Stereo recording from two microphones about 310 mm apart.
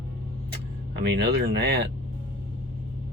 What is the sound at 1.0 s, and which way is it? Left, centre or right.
Speech, right.